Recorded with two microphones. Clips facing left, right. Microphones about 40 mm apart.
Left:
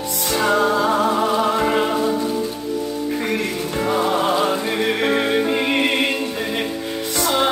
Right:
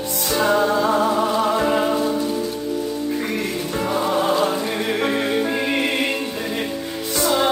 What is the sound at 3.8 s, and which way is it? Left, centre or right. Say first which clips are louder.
Music: left 1 dB; centre.